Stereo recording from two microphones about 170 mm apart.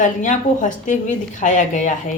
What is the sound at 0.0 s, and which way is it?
A woman's voice, 50° left (ahead or behind).